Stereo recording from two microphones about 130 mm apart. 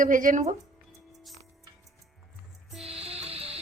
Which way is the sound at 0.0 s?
90° right.